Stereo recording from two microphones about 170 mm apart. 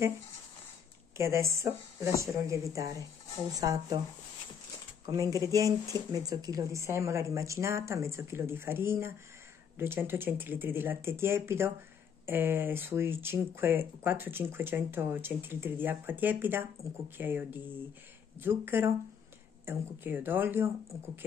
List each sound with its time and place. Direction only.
1.1 s speech: 15° right (ahead or behind)
5.0 s speech: 20° right (ahead or behind)